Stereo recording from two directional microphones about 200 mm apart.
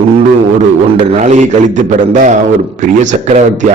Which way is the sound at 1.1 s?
35° right (ahead or behind).